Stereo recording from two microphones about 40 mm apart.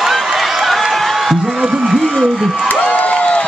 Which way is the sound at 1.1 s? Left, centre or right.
Centre.